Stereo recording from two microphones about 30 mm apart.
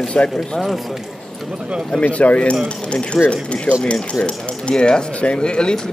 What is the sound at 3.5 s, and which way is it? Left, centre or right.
Speech, left.